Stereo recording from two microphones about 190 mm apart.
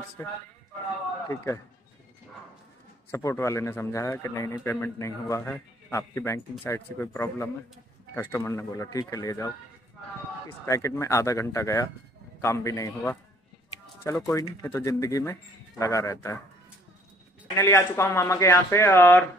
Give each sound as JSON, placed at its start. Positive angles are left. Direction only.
{"t": 0.2, "sound": "a man's voice", "side_deg": 15}
{"t": 3.1, "sound": "a man's voice", "side_deg": 15}
{"t": 10.6, "sound": "a man's voice", "side_deg": 15}
{"t": 17.6, "sound": "a man's voice", "side_deg": 15}